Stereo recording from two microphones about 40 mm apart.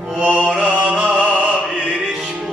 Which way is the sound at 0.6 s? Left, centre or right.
Right.